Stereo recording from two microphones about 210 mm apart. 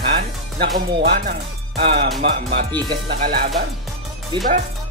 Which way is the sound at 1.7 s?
30° right (ahead or behind).